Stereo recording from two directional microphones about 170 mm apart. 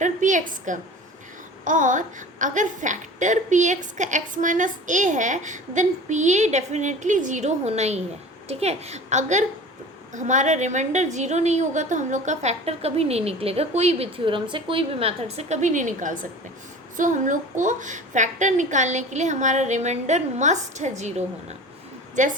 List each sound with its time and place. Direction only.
0.0 s a woman's voice: 50° right (ahead or behind)